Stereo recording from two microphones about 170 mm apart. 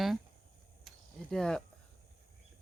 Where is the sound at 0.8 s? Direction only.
Centre (ahead or behind).